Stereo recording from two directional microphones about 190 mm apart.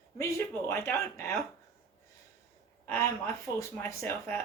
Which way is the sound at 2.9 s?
15° left (ahead or behind).